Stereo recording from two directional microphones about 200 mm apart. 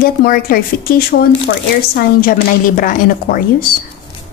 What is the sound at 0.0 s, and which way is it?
A woman's voice, 45° left (ahead or behind).